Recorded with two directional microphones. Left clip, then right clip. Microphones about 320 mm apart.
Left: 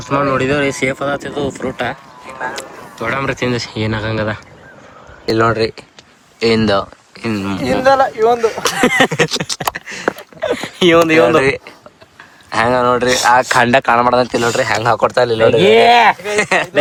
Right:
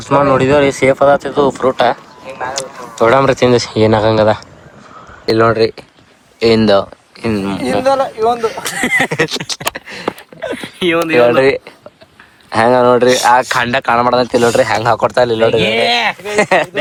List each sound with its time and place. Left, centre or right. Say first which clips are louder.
0.0 s speech: right 4 dB; centre
2.4 s a sound: right 3 dB; centre
3.7 s speech: right 10 dB; centre
5.2 s speech: right 3 dB; centre
9.5 s a sound: even; centre
10.6 s speech: left 4 dB; left
11.2 s speech: right 2 dB; centre
15.7 s speech: left 5 dB; left
16.2 s speech: right 3 dB; centre